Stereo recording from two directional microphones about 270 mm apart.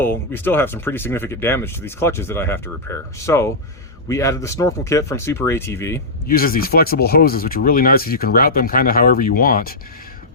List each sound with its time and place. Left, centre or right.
0.0 s speech: centre
6.2 s speech: left